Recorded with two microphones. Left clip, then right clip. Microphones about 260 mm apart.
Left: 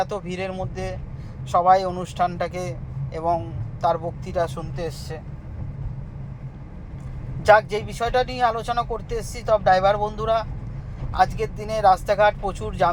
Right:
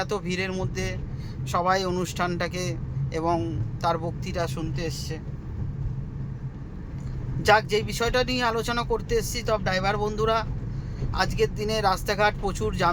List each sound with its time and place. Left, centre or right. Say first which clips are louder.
0.1 s speech: even; centre
7.4 s speech: left 4 dB; centre